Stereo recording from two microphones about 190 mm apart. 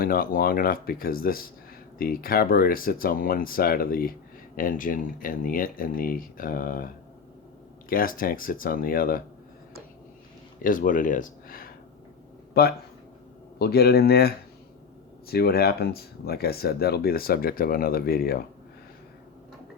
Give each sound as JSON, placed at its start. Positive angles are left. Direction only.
{"t": 0.0, "sound": "speech", "side_deg": 50}
{"t": 10.6, "sound": "speech", "side_deg": 45}